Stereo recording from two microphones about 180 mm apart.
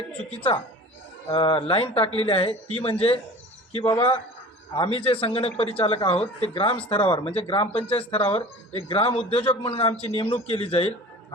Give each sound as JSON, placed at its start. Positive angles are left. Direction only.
{"t": 1.3, "sound": "speech", "side_deg": 30}